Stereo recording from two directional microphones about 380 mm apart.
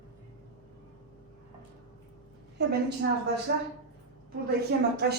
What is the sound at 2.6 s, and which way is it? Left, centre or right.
Speech, right.